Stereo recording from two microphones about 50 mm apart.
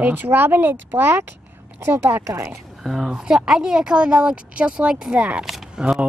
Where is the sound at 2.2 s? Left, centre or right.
Right.